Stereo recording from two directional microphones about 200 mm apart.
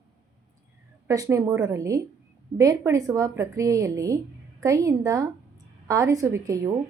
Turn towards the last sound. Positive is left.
turn(degrees=-15)  # may be behind; listen again after turning